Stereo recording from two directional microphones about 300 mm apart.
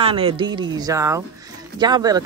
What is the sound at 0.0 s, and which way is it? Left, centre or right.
Speech, centre.